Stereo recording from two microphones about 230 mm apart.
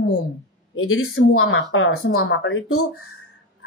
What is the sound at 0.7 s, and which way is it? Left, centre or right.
A woman's voice, left.